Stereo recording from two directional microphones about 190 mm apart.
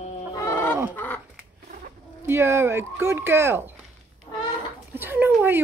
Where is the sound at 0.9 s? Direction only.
10° left (ahead or behind).